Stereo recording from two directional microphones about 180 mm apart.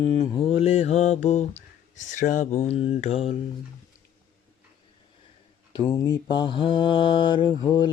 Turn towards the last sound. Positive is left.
turn(degrees=25)  # may be behind; listen again after turning